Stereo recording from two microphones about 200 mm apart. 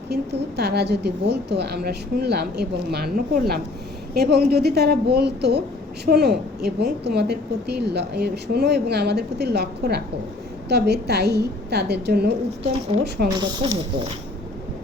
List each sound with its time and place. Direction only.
0.1 s a woman's voice: 55° right (ahead or behind)
13.4 s speech: 25° right (ahead or behind)